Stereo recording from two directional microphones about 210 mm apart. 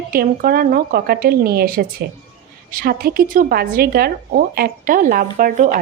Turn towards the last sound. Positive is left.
turn(degrees=-40)  # may be behind; listen again after turning